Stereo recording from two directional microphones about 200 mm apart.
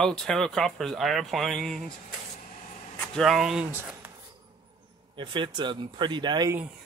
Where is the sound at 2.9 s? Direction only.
Centre (ahead or behind).